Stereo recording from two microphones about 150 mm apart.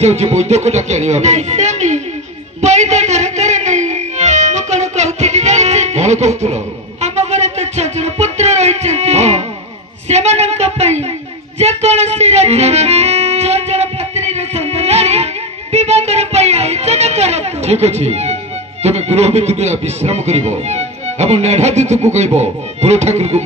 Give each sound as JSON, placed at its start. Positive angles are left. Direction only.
{"t": 0.0, "sound": "music", "side_deg": -45}
{"t": 11.5, "sound": "speech", "side_deg": -45}
{"t": 15.7, "sound": "music", "side_deg": -45}